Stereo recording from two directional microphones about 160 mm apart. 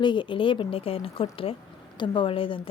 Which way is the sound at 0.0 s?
30° left (ahead or behind).